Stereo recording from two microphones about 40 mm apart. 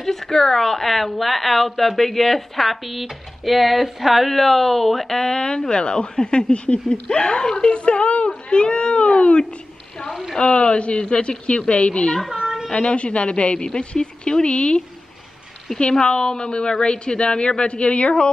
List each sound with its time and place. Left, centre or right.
0.0 s a woman's voice: centre; by 9.4 s left
10.0 s speech: centre
10.3 s a woman's voice: left
12.3 s a sound: centre
12.7 s a woman's voice: left
15.8 s a woman's voice: left